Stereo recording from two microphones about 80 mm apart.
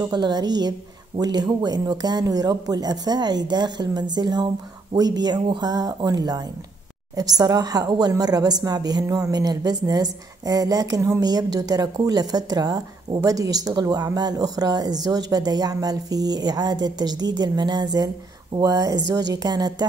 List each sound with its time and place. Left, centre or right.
0.1 s a woman's voice: right